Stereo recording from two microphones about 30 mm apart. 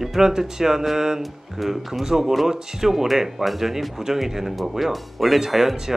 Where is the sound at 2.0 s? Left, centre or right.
Centre.